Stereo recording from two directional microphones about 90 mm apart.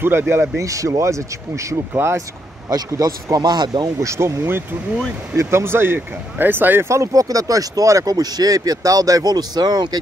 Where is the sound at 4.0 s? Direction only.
35° right (ahead or behind).